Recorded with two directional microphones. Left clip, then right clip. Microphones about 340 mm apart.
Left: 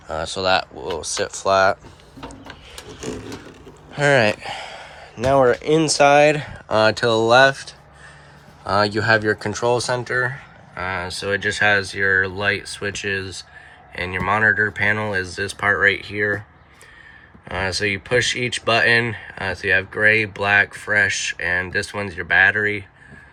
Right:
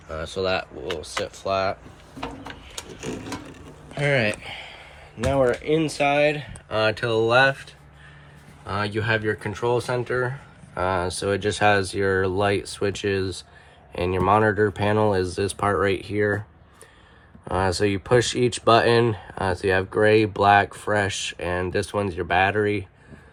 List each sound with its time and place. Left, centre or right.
0.1 s speech: centre
2.5 s a sound: left
4.0 s speech: centre
17.5 s speech: centre